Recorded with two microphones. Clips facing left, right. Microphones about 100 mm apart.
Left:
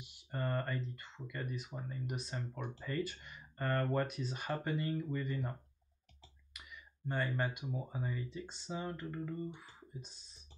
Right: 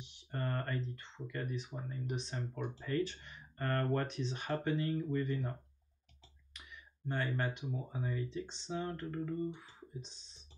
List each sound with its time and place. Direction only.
0.0 s speech: 5° left (ahead or behind)
6.5 s a sound: 5° left (ahead or behind)
7.1 s speech: 5° left (ahead or behind)